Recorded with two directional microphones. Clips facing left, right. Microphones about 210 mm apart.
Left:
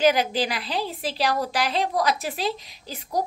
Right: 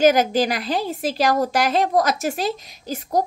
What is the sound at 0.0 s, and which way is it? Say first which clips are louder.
A woman's voice: right 5 dB; 45° right (ahead or behind).